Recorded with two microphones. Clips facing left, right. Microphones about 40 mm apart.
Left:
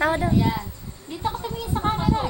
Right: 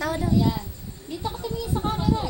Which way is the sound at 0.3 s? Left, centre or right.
Left.